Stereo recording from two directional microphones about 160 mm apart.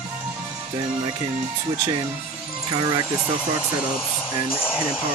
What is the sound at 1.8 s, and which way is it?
Speech, 25° right (ahead or behind).